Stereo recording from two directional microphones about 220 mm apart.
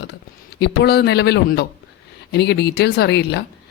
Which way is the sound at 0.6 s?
50° left (ahead or behind).